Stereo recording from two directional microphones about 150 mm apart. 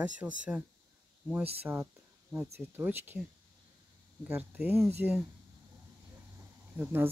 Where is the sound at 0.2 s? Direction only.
10° right (ahead or behind).